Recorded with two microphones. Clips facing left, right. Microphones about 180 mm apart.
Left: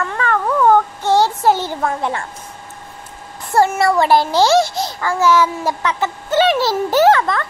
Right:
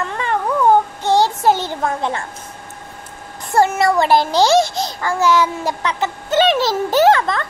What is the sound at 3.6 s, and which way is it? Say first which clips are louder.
A child's voice: left 1 dB; 20° right (ahead or behind).